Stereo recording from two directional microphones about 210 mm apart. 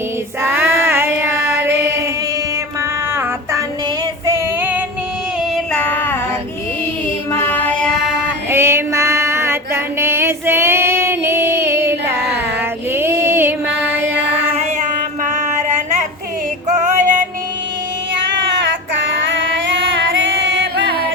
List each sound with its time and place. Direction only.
0.4 s child singing: 10° right (ahead or behind)
4.3 s female singing: 10° right (ahead or behind)
5.7 s child singing: 5° left (ahead or behind)
7.3 s music: 10° left (ahead or behind)
8.4 s female singing: 10° right (ahead or behind)
12.9 s music: 10° right (ahead or behind)
15.2 s a sound: 35° right (ahead or behind)
16.6 s music: 35° right (ahead or behind)
18.9 s music: 60° right (ahead or behind)